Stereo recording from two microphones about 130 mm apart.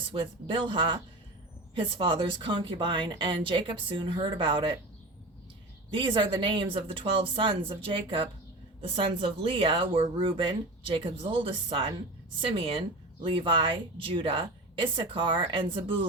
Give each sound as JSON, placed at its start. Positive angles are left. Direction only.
{"t": 0.0, "sound": "speech", "side_deg": -40}
{"t": 5.9, "sound": "a woman's voice", "side_deg": -40}